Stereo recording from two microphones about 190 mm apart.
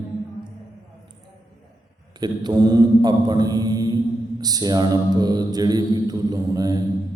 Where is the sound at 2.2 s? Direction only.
20° right (ahead or behind).